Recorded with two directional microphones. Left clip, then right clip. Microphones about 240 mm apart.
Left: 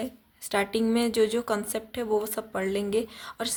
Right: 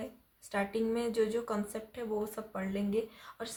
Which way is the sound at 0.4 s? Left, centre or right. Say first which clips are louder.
Left 7 dB; left.